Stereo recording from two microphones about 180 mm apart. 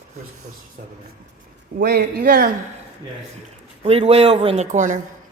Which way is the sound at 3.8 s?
35° right (ahead or behind).